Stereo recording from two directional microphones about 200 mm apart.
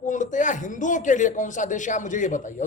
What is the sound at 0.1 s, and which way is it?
Speech, 40° left (ahead or behind).